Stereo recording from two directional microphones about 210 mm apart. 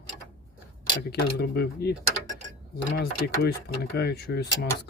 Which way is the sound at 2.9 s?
50° left (ahead or behind).